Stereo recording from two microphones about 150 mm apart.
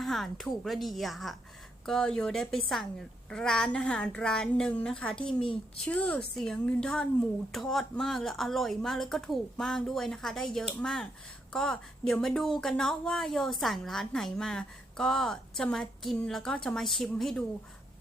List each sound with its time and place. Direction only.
0.0 s a woman's voice: centre (ahead or behind)
5.4 s a woman's voice: 35° left (ahead or behind)
5.8 s a woman's voice: 10° left (ahead or behind)